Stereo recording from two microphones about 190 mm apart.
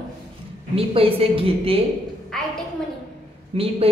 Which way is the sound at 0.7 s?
30° right (ahead or behind).